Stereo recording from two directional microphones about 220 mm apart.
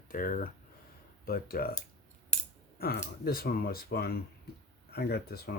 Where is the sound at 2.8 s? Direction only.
45° left (ahead or behind).